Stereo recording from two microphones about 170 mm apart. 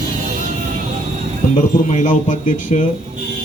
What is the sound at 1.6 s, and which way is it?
Speech, 45° left (ahead or behind).